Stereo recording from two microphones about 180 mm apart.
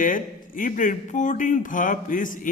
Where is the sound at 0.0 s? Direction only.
50° left (ahead or behind).